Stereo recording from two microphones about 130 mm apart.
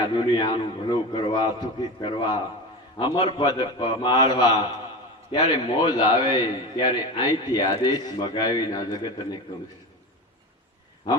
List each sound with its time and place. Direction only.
0.0 s a man's voice: 35° left (ahead or behind)